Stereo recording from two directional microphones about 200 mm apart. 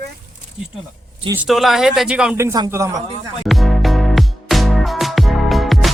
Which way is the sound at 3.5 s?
Centre (ahead or behind).